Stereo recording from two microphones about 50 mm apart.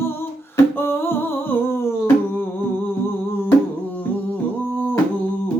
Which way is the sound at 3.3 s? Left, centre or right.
Left.